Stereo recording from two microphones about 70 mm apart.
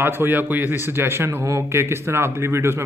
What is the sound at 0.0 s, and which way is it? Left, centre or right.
Speech, right.